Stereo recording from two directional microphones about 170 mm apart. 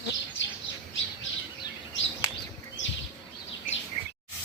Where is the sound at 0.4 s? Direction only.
90° left.